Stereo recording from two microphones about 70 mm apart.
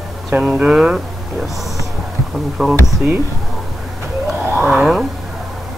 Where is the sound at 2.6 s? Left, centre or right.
Centre.